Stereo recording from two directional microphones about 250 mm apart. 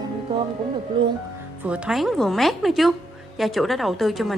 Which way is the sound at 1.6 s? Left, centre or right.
Centre.